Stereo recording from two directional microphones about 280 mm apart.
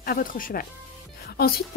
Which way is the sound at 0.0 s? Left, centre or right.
Left.